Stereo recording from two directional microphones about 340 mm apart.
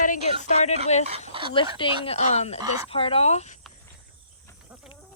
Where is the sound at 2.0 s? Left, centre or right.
Centre.